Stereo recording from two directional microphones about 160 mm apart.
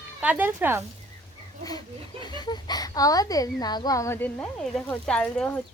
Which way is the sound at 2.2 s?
25° left (ahead or behind).